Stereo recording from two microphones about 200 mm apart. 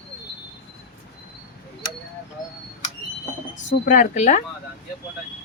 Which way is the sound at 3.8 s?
40° left (ahead or behind).